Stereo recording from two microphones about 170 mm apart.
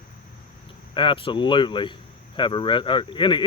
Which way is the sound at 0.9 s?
30° left (ahead or behind).